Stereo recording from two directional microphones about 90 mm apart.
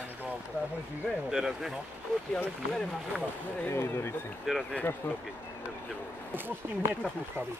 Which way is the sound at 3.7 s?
30° left (ahead or behind).